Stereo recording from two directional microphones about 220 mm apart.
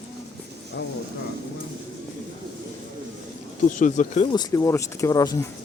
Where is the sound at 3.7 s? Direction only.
35° left (ahead or behind).